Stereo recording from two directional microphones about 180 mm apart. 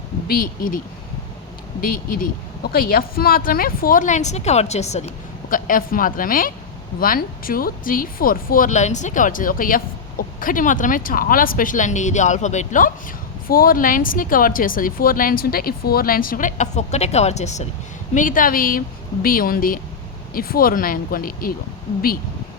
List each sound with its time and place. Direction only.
0.3 s speech: 55° left (ahead or behind)
1.8 s speech: 55° left (ahead or behind)
13.5 s speech: 55° left (ahead or behind)